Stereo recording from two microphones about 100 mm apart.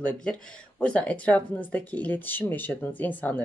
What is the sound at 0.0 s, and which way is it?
Speech, 10° left (ahead or behind).